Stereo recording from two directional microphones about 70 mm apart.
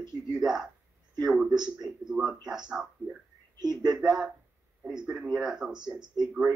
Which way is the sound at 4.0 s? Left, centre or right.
Centre.